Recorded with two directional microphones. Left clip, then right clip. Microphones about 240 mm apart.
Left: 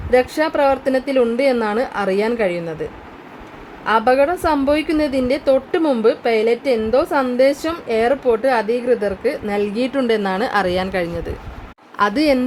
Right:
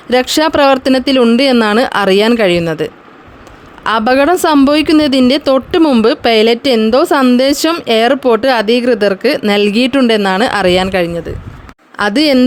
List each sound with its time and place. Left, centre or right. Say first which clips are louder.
0.1 s a woman's voice: right 5 dB; right
12.1 s a woman's voice: right 8 dB; right